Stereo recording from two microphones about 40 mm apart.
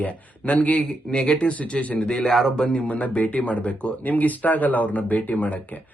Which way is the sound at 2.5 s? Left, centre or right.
Left.